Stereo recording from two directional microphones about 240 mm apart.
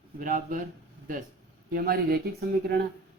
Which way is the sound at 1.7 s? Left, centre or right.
Right.